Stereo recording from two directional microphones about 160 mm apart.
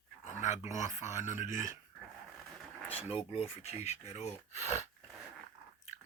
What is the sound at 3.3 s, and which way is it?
Speech, 40° left (ahead or behind).